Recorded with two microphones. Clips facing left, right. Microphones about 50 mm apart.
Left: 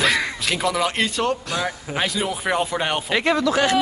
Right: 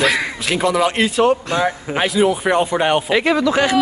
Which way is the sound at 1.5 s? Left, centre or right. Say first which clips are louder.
Right 7 dB; right.